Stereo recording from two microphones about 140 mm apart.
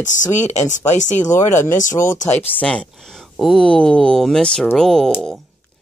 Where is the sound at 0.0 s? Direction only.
60° left (ahead or behind).